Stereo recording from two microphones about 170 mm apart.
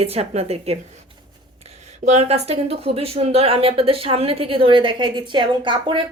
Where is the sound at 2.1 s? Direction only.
40° right (ahead or behind).